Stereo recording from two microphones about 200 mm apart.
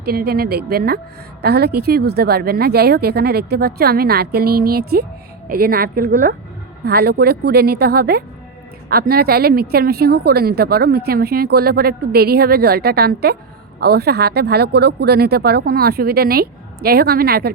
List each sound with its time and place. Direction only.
0.0 s a woman's voice: 50° right (ahead or behind)